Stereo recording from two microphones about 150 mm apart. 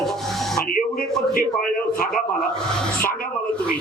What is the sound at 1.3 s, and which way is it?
Speech, 70° left (ahead or behind).